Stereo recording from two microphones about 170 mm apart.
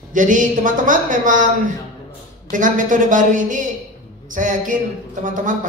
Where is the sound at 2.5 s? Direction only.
50° right (ahead or behind).